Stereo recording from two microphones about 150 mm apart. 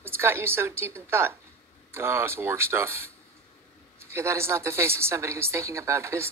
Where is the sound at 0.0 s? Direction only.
15° right (ahead or behind).